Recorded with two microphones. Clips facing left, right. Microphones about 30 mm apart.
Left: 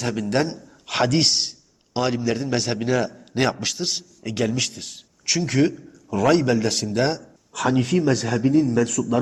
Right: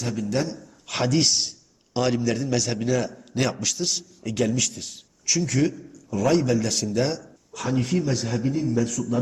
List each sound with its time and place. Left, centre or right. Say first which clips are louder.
0.0 s a man's voice: left 4 dB; left
1.9 s a man's voice: left 1 dB; centre
2.4 s a man's voice: left 1 dB; left
4.5 s a man's voice: left 1 dB; left
5.4 s a man's voice: left 3 dB; left
6.1 s a man's voice: left 3 dB; left
6.5 s a man's voice: left 2 dB; left
6.8 s a man's voice: left 2 dB; left
7.5 s a man's voice: left 4 dB; left